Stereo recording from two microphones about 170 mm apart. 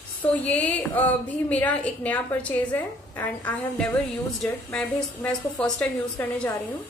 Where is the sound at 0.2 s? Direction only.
10° left (ahead or behind).